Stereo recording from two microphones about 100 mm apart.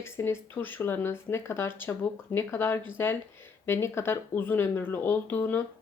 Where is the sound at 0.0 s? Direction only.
25° left (ahead or behind).